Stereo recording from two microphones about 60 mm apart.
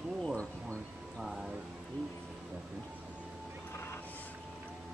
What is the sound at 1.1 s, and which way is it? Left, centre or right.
Speech, centre.